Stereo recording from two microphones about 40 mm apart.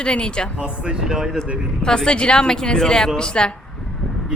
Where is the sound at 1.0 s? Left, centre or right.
Centre.